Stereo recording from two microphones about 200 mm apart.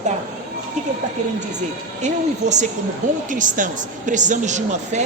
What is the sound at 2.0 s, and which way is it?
A woman's voice, 35° right (ahead or behind).